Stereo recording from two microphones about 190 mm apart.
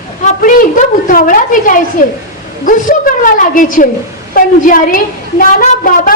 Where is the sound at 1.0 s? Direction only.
45° left (ahead or behind).